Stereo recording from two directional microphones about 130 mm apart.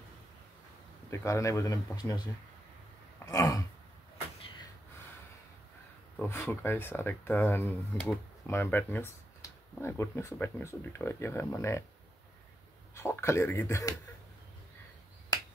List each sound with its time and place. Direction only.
1.1 s speech: 20° left (ahead or behind)
3.3 s throat clearing: 25° left (ahead or behind)
6.2 s speech: 20° left (ahead or behind)
12.9 s speech: 20° left (ahead or behind)